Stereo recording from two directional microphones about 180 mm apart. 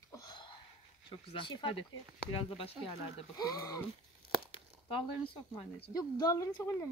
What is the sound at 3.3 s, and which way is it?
Speech, 20° left (ahead or behind).